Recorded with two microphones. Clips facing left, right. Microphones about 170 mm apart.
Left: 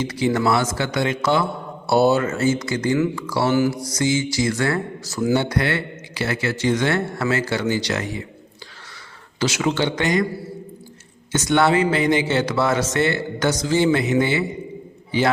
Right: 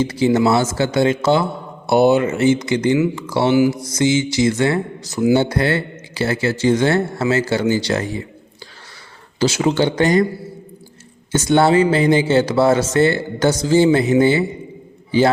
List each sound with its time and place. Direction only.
0.0 s speech: 30° right (ahead or behind)
9.4 s speech: 30° right (ahead or behind)
11.3 s speech: 30° right (ahead or behind)